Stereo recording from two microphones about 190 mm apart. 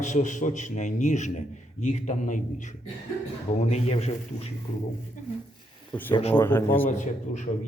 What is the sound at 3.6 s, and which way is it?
Speech, 35° left (ahead or behind).